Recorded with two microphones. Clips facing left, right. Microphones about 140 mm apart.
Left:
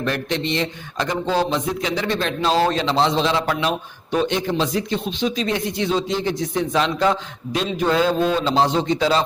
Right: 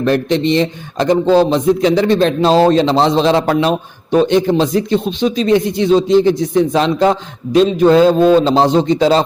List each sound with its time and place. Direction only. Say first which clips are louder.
0.0 s a man's voice: right 10 dB; 30° right (ahead or behind)